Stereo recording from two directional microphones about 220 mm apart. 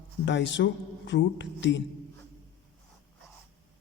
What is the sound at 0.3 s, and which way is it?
Speech, 55° left (ahead or behind).